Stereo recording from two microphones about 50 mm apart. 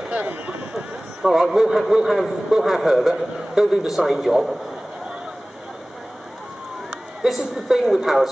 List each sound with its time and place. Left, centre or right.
0.1 s a sound: right
1.2 s a man's voice: centre
7.2 s a man's voice: centre